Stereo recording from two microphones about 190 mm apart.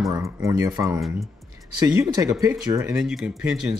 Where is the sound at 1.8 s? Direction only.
15° right (ahead or behind).